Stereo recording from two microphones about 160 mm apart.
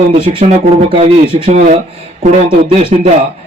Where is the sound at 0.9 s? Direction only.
35° right (ahead or behind).